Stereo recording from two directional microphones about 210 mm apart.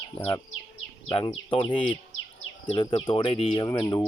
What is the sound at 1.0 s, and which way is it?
Speech, 25° left (ahead or behind).